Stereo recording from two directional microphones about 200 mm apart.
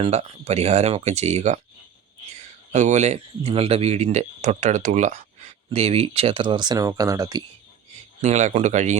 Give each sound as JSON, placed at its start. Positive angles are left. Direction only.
{"t": 0.0, "sound": "speech", "side_deg": -30}
{"t": 8.2, "sound": "speech", "side_deg": -35}